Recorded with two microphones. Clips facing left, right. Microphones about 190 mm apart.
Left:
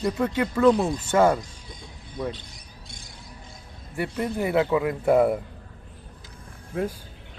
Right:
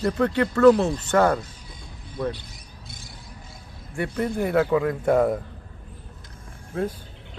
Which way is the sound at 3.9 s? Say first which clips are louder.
Right 2 dB; 5° left (ahead or behind).